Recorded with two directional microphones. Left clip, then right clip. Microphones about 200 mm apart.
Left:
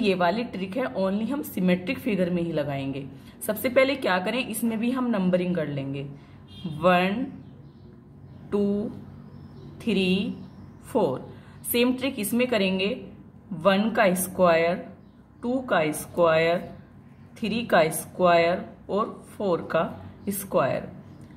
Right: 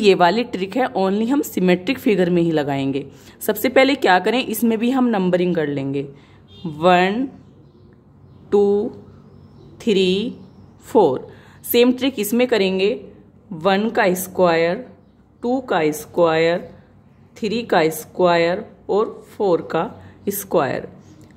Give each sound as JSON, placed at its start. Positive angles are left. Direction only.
{"t": 0.0, "sound": "a woman's voice", "side_deg": -45}
{"t": 8.5, "sound": "a woman's voice", "side_deg": -35}